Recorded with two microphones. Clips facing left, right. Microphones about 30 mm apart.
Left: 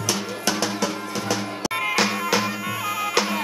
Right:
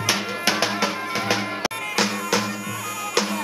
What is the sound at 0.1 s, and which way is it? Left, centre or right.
Music, right.